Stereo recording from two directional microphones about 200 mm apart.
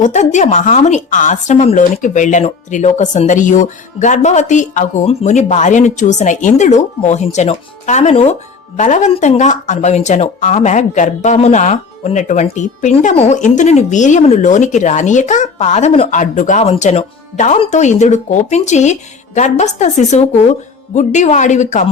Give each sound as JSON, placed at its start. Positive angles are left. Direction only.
{"t": 0.0, "sound": "speech", "side_deg": 35}